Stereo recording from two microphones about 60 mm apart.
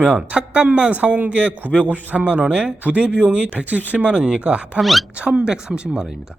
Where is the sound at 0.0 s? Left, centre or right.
Right.